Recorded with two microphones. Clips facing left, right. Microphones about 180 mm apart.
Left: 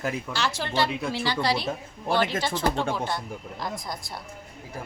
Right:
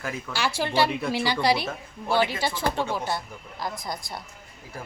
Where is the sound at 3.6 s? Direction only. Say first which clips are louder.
Right 3 dB; centre (ahead or behind).